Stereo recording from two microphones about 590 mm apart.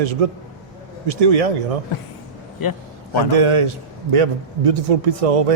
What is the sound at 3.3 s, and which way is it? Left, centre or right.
A man's voice, right.